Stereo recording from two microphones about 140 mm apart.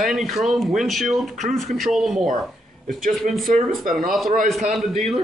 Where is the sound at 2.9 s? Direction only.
75° right (ahead or behind).